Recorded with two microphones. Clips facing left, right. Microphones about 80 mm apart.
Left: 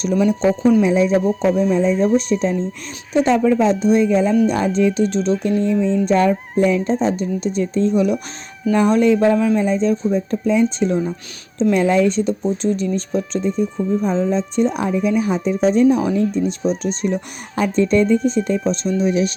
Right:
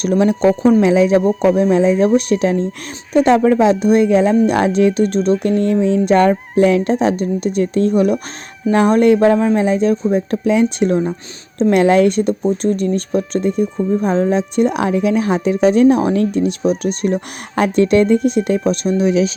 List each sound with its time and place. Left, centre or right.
0.0 s speech: right
0.8 s speech: right
1.4 s speech: right
3.2 s speech: right